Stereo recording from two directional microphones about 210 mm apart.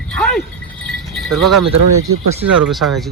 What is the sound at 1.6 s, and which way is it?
Speech, 90° right.